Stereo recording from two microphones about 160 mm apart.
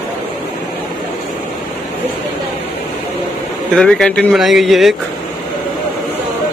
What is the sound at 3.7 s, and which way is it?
Speech, 5° left (ahead or behind).